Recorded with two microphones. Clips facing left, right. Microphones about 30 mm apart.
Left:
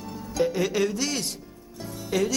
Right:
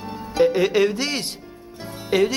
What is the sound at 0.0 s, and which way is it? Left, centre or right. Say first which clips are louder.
Speech: right 7 dB; right.